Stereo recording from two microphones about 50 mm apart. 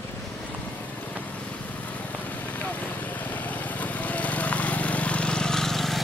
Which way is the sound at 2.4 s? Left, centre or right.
Left.